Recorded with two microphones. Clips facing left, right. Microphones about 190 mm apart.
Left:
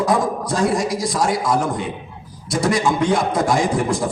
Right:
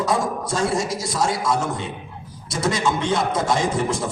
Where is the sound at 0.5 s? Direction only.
25° right (ahead or behind).